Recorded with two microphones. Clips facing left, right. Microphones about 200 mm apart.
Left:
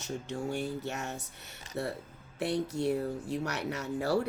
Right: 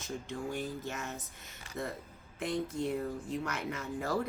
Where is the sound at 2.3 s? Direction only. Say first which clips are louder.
Left 3 dB; 75° left (ahead or behind).